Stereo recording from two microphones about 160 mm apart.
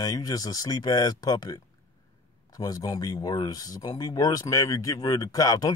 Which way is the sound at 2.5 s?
25° left (ahead or behind).